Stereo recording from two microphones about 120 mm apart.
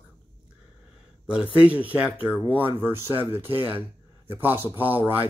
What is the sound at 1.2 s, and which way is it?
Speech, 10° right (ahead or behind).